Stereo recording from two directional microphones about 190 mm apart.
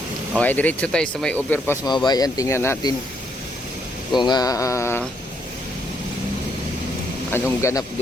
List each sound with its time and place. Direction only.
0.3 s speech: 10° left (ahead or behind)
4.1 s speech: 25° left (ahead or behind)
7.6 s speech: 15° left (ahead or behind)